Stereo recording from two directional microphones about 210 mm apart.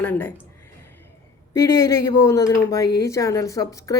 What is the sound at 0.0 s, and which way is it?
Speech, 5° left (ahead or behind).